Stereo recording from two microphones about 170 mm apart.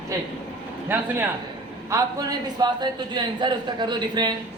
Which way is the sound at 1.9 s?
25° right (ahead or behind).